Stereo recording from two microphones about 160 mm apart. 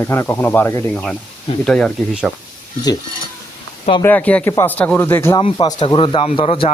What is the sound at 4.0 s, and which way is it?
Speech, 10° left (ahead or behind).